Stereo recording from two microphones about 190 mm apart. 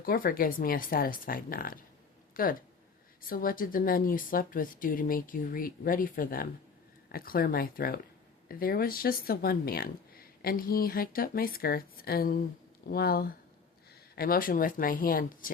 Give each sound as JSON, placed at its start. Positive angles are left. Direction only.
{"t": 0.0, "sound": "speech", "side_deg": 50}